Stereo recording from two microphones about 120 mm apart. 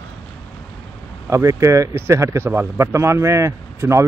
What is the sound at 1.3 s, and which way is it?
Speech, 25° right (ahead or behind).